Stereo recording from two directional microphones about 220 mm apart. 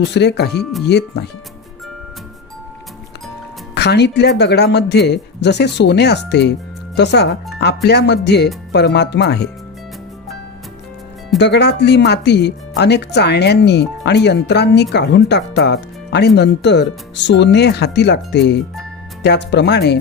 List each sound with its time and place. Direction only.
0.0 s speech: 50° left (ahead or behind)
3.8 s speech: 50° left (ahead or behind)
11.3 s speech: 50° left (ahead or behind)